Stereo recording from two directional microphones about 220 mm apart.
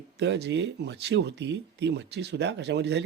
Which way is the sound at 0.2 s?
50° right (ahead or behind).